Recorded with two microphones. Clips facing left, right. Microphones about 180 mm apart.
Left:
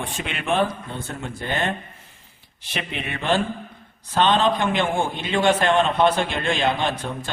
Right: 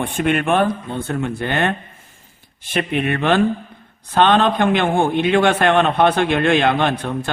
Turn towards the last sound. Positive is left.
turn(degrees=-60)  # may be behind; listen again after turning